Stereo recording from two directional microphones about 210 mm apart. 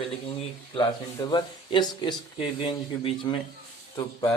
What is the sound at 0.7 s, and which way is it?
Speech, 20° left (ahead or behind).